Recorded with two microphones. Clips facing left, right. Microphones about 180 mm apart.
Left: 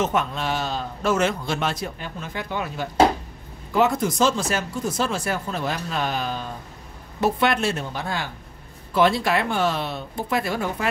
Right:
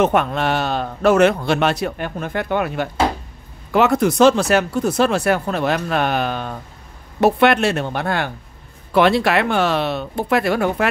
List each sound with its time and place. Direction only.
0.0 s speech: 60° right (ahead or behind)